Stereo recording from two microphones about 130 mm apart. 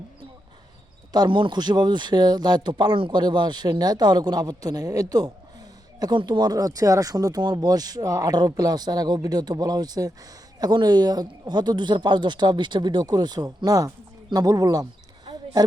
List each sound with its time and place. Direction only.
1.1 s a man's voice: 35° right (ahead or behind)